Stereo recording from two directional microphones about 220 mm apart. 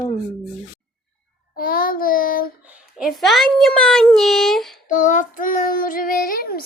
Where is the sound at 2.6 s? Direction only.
5° right (ahead or behind).